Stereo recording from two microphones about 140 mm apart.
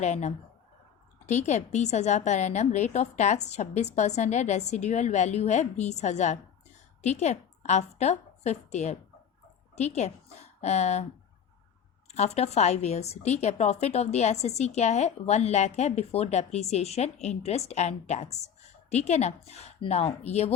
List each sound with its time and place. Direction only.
0.0 s a woman's voice: 55° left (ahead or behind)
12.0 s a woman's voice: 50° left (ahead or behind)